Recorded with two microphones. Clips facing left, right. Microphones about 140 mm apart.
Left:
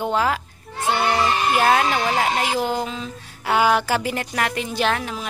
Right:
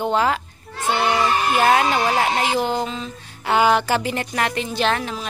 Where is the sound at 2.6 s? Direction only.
5° left (ahead or behind).